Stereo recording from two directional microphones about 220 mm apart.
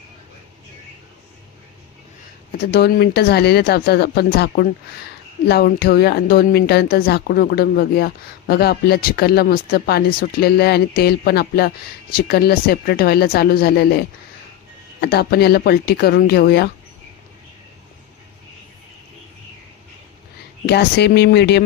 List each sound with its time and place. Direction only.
2.6 s a woman's voice: 45° left (ahead or behind)
15.0 s a woman's voice: 45° left (ahead or behind)
20.7 s a woman's voice: 50° left (ahead or behind)